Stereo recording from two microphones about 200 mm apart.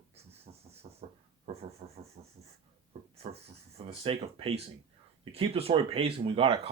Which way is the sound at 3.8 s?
30° right (ahead or behind).